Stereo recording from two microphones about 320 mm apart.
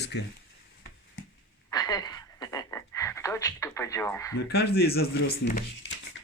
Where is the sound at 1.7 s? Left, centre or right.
Centre.